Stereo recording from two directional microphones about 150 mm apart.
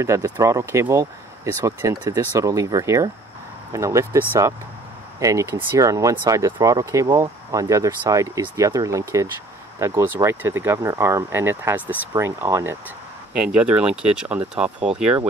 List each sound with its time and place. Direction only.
0.0 s speech: 20° right (ahead or behind)